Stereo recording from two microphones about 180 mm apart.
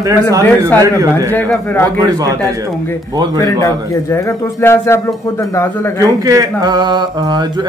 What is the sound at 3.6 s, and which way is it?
A man's voice, 15° left (ahead or behind).